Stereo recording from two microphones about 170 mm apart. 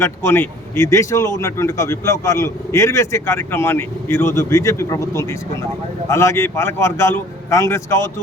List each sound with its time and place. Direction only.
0.0 s speech: 15° left (ahead or behind)